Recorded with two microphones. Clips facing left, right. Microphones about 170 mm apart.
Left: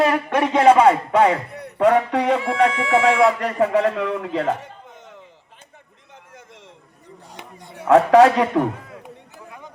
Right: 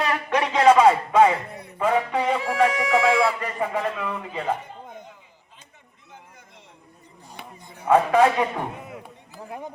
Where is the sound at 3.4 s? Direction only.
80° left.